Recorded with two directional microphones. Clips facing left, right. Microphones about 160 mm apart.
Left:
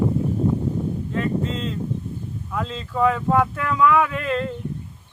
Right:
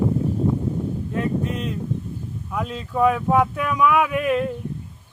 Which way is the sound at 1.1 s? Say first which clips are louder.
Even; 15° right (ahead or behind).